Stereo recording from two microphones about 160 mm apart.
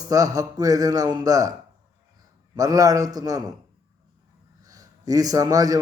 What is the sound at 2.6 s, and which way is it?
Speech, 20° right (ahead or behind).